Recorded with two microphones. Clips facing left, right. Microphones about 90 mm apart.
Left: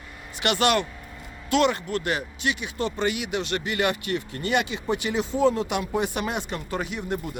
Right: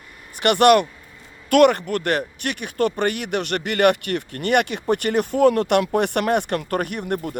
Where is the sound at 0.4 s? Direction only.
55° right (ahead or behind).